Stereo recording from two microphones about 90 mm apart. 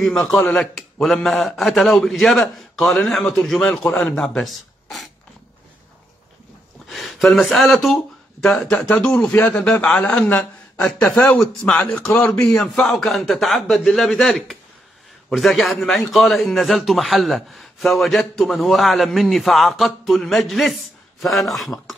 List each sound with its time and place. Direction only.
0.1 s a man's voice: 5° left (ahead or behind)
6.9 s a man's voice: centre (ahead or behind)